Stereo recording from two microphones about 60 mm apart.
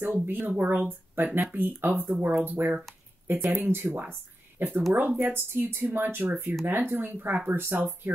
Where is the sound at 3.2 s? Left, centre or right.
Right.